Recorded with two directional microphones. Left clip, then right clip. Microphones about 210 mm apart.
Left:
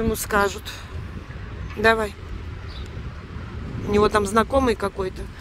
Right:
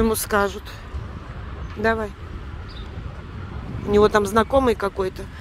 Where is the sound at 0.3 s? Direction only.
5° left (ahead or behind).